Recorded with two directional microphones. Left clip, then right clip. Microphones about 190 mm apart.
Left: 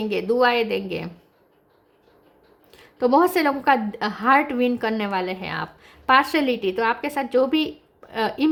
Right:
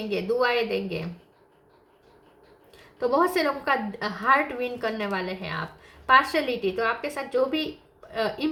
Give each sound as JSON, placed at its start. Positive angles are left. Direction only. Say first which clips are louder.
{"t": 0.1, "sound": "a woman's voice", "louder": "left 4 dB", "side_deg": 50}
{"t": 2.7, "sound": "a woman's voice", "louder": "left 5 dB", "side_deg": 50}